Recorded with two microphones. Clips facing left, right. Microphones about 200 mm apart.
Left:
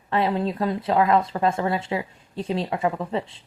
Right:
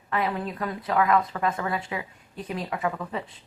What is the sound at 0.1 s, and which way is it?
Speech, 30° left (ahead or behind).